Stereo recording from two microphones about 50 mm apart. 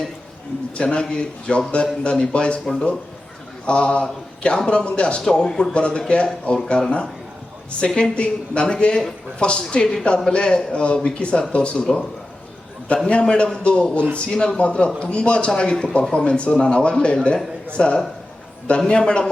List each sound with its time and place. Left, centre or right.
0.8 s a man's voice: centre
13.1 s speech: left